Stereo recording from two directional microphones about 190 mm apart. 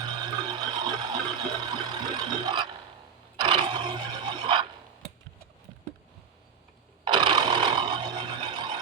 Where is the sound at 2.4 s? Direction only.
25° right (ahead or behind).